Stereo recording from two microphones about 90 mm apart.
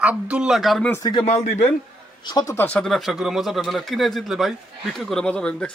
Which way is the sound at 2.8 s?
Centre (ahead or behind).